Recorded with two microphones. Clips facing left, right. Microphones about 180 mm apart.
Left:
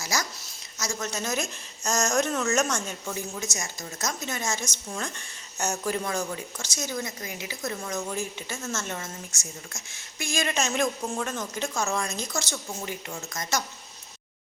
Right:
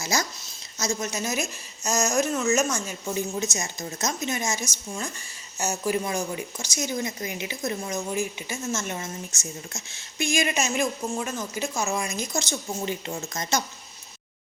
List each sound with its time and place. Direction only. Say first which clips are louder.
0.0 s a sound: right 3 dB; 25° right (ahead or behind)
0.8 s speech: right 3 dB; 15° right (ahead or behind)
3.3 s speech: right 5 dB; 25° right (ahead or behind)